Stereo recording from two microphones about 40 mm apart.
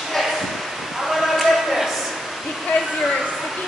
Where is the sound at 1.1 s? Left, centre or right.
Centre.